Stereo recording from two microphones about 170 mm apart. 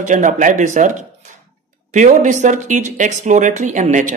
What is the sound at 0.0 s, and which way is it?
Speech, 45° right (ahead or behind).